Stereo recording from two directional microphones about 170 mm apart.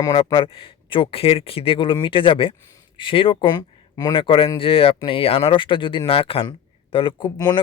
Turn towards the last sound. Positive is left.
turn(degrees=25)  # may be behind; listen again after turning